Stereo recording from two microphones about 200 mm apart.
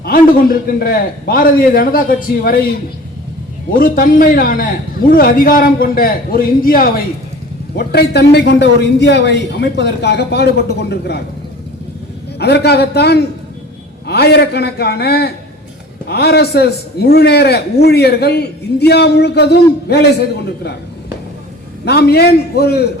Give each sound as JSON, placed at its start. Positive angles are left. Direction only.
{"t": 0.0, "sound": "a man's voice", "side_deg": 45}
{"t": 3.8, "sound": "a man's voice", "side_deg": 45}
{"t": 12.4, "sound": "a man's voice", "side_deg": 55}
{"t": 21.8, "sound": "a man's voice", "side_deg": 55}